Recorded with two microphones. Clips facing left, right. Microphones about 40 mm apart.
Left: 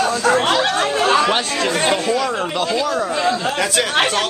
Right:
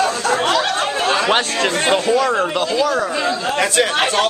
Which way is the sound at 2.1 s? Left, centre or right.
Centre.